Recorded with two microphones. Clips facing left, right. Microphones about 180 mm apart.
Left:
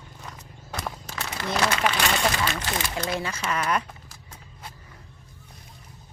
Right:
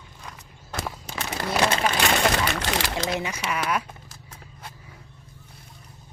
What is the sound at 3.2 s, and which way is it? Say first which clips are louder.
Speech: even; 15° right (ahead or behind).